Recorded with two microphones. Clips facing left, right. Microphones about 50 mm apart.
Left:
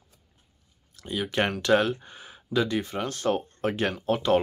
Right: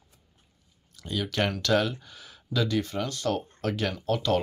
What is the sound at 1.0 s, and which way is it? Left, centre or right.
Speech, left.